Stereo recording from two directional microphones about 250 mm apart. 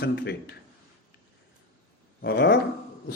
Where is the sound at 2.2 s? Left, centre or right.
Left.